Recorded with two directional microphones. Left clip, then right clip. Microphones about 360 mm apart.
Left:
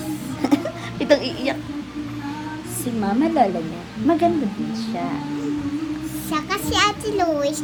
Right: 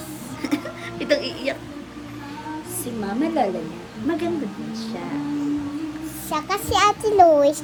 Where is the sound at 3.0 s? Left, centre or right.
Centre.